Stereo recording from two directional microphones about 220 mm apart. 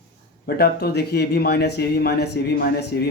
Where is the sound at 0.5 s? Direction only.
45° left (ahead or behind).